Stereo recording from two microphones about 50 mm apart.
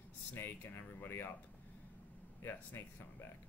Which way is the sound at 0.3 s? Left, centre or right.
Left.